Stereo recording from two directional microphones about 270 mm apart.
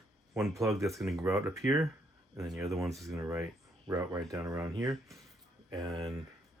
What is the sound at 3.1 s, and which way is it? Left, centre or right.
Speech, centre.